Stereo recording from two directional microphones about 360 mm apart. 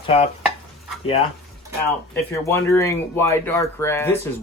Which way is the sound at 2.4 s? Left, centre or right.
Centre.